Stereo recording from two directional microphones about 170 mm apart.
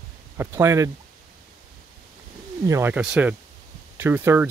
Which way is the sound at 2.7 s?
15° right (ahead or behind).